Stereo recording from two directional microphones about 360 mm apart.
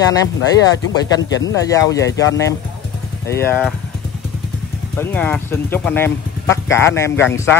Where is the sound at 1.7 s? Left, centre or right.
Centre.